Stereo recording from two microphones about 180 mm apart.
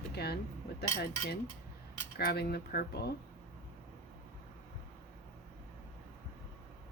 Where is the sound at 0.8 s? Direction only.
60° left (ahead or behind).